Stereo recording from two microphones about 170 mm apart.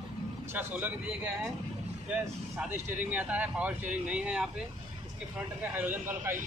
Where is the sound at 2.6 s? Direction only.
10° right (ahead or behind).